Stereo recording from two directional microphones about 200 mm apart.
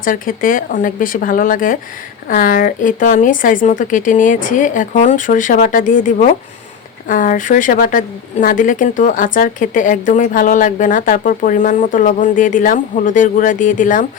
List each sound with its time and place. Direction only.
0.0 s a woman's voice: 45° left (ahead or behind)